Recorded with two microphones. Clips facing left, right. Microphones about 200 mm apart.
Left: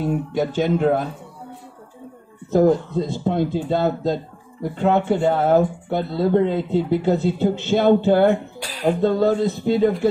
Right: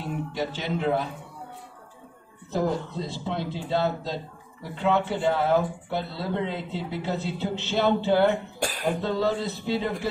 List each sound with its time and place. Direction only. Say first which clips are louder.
0.3 s speech: left 10 dB; 50° left (ahead or behind)
2.5 s speech: left 10 dB; 50° left (ahead or behind)
8.5 s a sound: right 3 dB; 50° right (ahead or behind)
8.8 s speech: left 9 dB; 45° left (ahead or behind)